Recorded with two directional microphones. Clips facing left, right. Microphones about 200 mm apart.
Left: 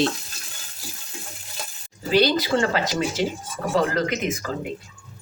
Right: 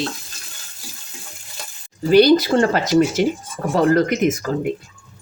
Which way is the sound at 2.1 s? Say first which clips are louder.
Right 7 dB; 45° right (ahead or behind).